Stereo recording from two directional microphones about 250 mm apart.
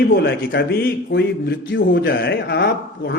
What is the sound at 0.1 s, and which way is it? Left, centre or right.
A man's voice, left.